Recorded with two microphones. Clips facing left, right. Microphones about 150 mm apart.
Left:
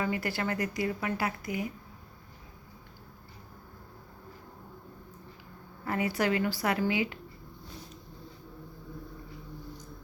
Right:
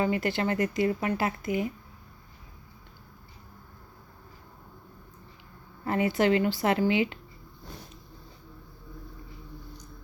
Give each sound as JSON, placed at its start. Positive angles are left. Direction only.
{"t": 0.0, "sound": "speech", "side_deg": -20}
{"t": 5.8, "sound": "speech", "side_deg": -25}